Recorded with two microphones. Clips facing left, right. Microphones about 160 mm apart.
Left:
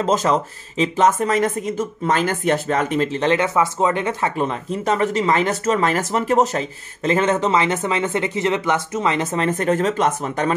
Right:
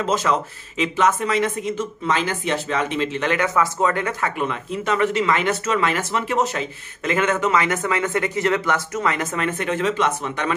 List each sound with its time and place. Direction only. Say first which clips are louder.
0.0 s speech: left 3 dB; 40° left (ahead or behind)